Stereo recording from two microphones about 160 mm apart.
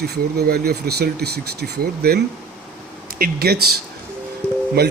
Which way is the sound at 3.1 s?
65° right (ahead or behind).